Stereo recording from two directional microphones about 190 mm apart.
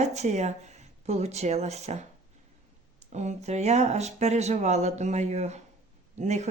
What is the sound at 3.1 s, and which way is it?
Speech, 40° right (ahead or behind).